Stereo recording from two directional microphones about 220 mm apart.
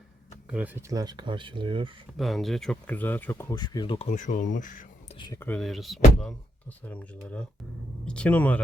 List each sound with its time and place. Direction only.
0.5 s speech: 10° right (ahead or behind)
2.1 s speech: centre (ahead or behind); by 4.9 s 35° left (ahead or behind)
5.1 s speech: 20° left (ahead or behind)
5.4 s speech: 5° left (ahead or behind)